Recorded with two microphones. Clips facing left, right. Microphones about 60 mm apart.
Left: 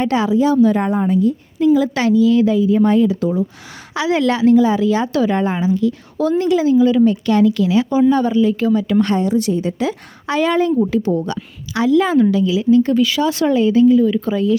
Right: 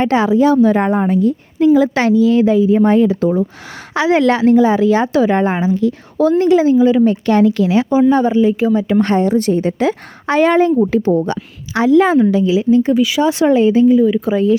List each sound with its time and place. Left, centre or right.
0.0 s a woman's voice: right
8.8 s a woman's voice: right
12.9 s speech: centre
13.2 s speech: right
14.0 s speech: centre